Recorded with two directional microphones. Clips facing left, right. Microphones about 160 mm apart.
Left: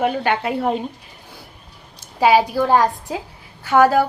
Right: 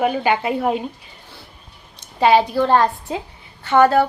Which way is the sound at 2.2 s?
10° left (ahead or behind).